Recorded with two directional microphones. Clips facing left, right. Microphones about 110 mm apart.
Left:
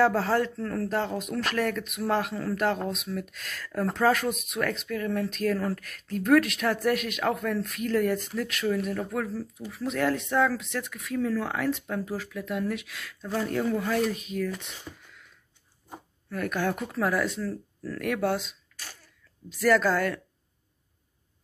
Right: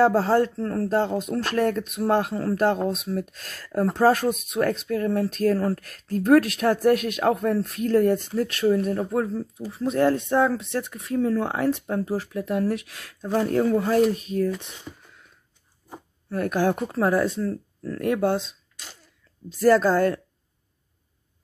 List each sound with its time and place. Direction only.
0.0 s speech: 30° right (ahead or behind)
16.3 s speech: 35° right (ahead or behind)